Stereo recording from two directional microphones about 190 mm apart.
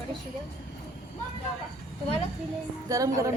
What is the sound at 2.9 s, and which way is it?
Speech, 15° right (ahead or behind).